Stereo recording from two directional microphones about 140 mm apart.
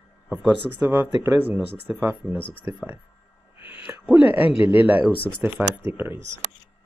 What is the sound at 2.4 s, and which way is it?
Speech, 40° left (ahead or behind).